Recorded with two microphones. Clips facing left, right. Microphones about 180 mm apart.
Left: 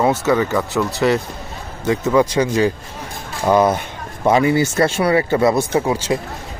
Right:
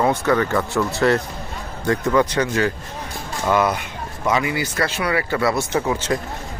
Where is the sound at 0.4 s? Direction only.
5° left (ahead or behind); by 3.8 s 20° left (ahead or behind).